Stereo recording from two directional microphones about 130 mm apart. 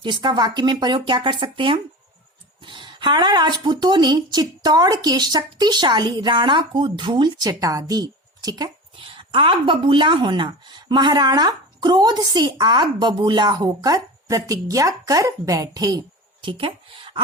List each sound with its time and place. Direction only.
0.0 s speech: 35° right (ahead or behind)